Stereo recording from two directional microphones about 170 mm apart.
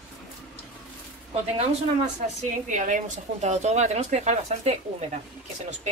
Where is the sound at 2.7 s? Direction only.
45° right (ahead or behind).